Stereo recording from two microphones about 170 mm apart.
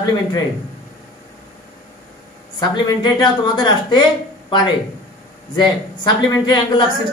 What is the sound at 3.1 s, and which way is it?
Speech, 25° left (ahead or behind).